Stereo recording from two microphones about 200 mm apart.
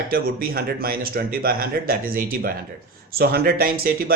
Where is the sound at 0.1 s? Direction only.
50° right (ahead or behind).